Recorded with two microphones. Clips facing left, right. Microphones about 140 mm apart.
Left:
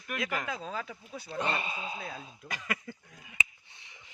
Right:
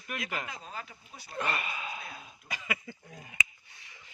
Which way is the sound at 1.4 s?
25° left (ahead or behind).